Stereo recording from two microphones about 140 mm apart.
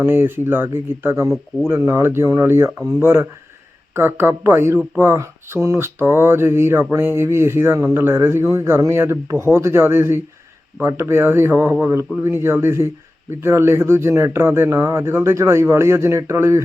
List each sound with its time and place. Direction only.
0.0 s speech: 15° right (ahead or behind)